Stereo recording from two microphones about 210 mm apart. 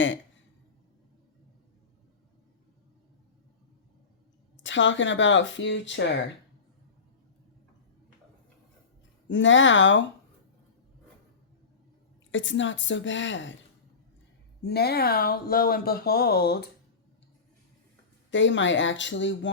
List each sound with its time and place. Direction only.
4.6 s speech: 60° left (ahead or behind)
9.2 s speech: 60° left (ahead or behind)
12.3 s speech: 60° left (ahead or behind)
14.6 s speech: 50° left (ahead or behind)
18.3 s speech: 60° left (ahead or behind)